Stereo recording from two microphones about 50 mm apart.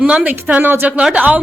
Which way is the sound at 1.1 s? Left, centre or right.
Right.